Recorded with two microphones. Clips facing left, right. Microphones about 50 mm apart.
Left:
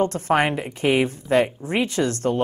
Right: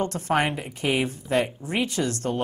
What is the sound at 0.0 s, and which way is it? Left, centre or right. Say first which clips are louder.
Speech: left 4 dB; left.